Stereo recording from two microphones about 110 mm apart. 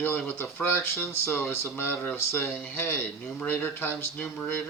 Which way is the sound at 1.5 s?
25° left (ahead or behind).